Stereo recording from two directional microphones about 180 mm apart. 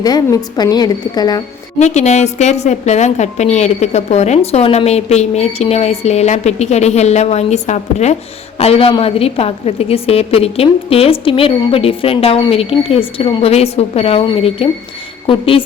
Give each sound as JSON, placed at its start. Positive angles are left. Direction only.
{"t": 0.0, "sound": "a woman's voice", "side_deg": 20}
{"t": 1.8, "sound": "a woman's voice", "side_deg": 40}